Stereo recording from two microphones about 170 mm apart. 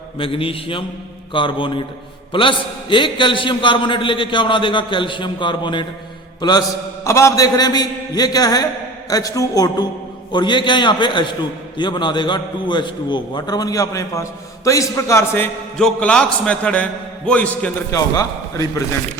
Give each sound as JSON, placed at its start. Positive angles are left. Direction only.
{"t": 0.2, "sound": "a man's voice", "side_deg": 30}
{"t": 15.8, "sound": "a man's voice", "side_deg": 5}
{"t": 18.1, "sound": "a man's voice", "side_deg": 20}